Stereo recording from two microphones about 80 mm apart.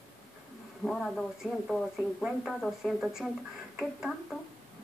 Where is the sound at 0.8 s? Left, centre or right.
Centre.